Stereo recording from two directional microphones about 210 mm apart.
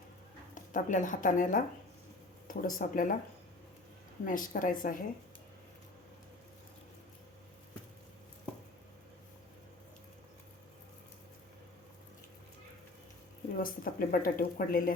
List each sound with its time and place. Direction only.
0.5 s a woman's voice: 35° left (ahead or behind)
4.3 s a woman's voice: 40° left (ahead or behind)
13.6 s speech: 40° left (ahead or behind)